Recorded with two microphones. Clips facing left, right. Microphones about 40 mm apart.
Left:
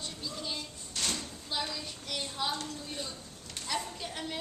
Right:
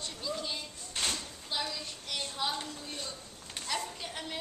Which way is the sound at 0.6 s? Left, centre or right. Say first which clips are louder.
Right 1 dB; right.